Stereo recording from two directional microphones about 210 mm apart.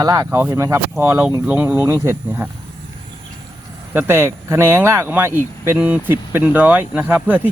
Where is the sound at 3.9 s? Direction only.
10° right (ahead or behind).